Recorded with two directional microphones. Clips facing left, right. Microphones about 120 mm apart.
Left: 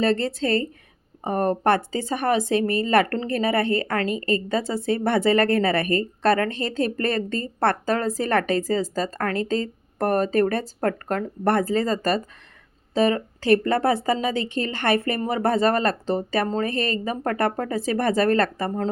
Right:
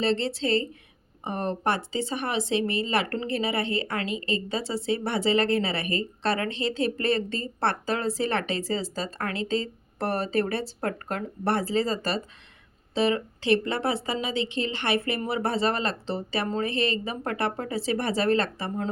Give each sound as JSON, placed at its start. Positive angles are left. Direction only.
{"t": 0.0, "sound": "speech", "side_deg": 50}